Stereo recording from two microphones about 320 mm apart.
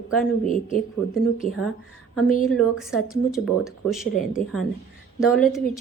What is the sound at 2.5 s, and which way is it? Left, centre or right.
Speech, centre.